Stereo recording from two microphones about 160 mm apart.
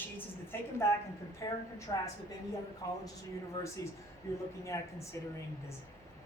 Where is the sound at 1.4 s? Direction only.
25° left (ahead or behind).